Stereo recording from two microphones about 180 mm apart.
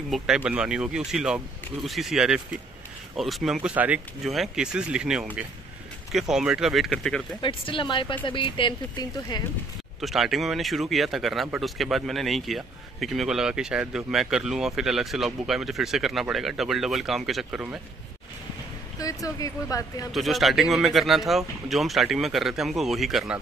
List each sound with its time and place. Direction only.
0.1 s speech: 5° right (ahead or behind)
7.4 s speech: 30° left (ahead or behind)
9.9 s speech: centre (ahead or behind)
18.9 s speech: 20° left (ahead or behind)
20.1 s speech: centre (ahead or behind)